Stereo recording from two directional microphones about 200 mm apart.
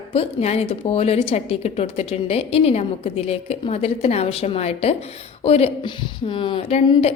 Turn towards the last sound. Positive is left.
turn(degrees=30)  # may be behind; listen again after turning